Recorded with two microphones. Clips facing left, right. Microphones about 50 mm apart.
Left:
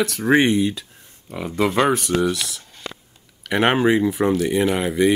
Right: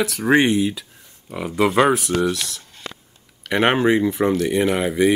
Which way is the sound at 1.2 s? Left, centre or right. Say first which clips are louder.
Right 2 dB; centre.